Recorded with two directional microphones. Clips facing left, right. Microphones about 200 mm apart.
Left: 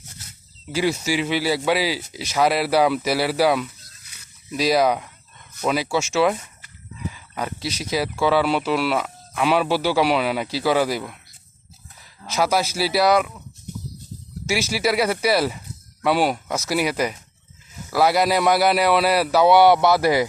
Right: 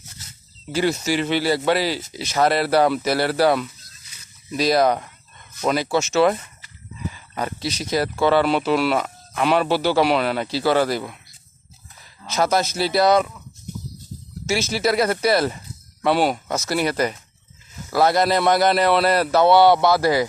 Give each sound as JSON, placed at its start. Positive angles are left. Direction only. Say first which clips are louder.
{"t": 0.7, "sound": "speech", "louder": "right 1 dB", "side_deg": 5}
{"t": 12.2, "sound": "speech", "louder": "right 1 dB", "side_deg": 5}
{"t": 14.4, "sound": "speech", "louder": "right 1 dB", "side_deg": 10}